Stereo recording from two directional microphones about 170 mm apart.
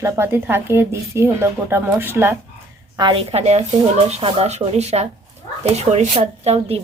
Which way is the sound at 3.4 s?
40° right (ahead or behind).